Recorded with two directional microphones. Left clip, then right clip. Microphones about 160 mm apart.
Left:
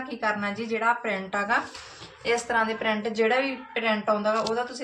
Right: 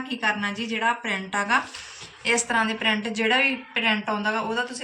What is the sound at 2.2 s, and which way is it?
A woman's voice, 50° left (ahead or behind).